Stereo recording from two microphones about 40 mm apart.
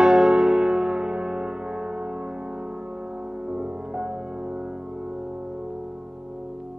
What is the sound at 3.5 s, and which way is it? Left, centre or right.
Music, right.